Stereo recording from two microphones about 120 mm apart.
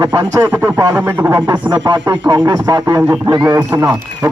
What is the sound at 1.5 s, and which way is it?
A man's voice, 35° right (ahead or behind).